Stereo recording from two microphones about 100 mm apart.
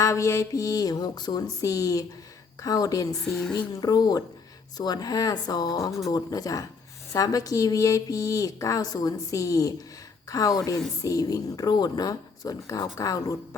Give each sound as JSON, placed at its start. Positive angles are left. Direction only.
{"t": 0.0, "sound": "a woman's voice", "side_deg": 30}
{"t": 3.1, "sound": "speech", "side_deg": 5}
{"t": 3.7, "sound": "a woman's voice", "side_deg": 40}